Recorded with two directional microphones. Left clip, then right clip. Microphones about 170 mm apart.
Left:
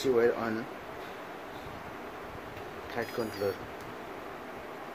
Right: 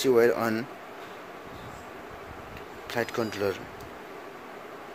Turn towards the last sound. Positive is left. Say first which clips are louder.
# right 4 dB
turn(degrees=-60)  # may be behind; listen again after turning